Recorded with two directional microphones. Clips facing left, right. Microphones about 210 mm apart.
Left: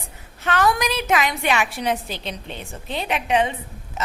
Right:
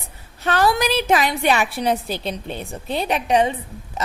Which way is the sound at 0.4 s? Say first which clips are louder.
Right 2 dB; 30° right (ahead or behind).